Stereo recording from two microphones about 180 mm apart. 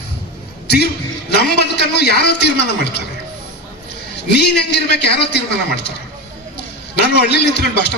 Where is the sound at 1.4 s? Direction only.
65° left (ahead or behind).